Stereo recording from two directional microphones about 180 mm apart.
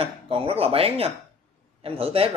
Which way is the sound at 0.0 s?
30° right (ahead or behind).